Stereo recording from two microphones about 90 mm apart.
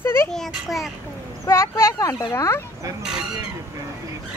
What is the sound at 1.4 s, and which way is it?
Speech, 30° left (ahead or behind).